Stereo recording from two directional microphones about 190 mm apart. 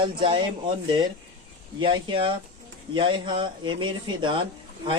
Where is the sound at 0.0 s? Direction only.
25° right (ahead or behind).